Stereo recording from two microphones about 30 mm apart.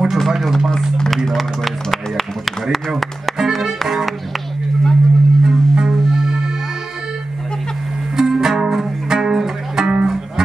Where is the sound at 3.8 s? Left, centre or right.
Centre.